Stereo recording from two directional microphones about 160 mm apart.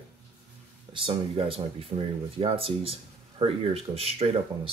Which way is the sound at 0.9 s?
35° right (ahead or behind).